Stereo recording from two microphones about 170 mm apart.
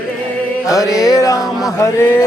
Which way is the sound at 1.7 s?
20° left (ahead or behind).